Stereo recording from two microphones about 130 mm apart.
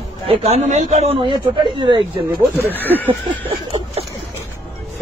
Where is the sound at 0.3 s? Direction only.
55° right (ahead or behind).